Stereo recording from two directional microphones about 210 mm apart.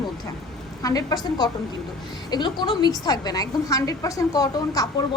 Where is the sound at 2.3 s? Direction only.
20° left (ahead or behind).